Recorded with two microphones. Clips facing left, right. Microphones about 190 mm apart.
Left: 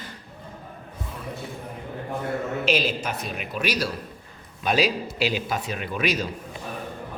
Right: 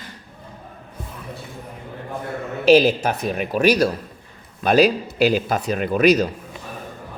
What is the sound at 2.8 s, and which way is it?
A man's voice, 45° right (ahead or behind).